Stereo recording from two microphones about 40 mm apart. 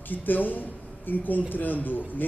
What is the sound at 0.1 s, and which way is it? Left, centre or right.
A man's voice, left.